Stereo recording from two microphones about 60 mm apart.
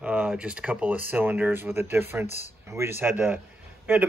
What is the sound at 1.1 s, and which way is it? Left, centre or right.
Speech, right.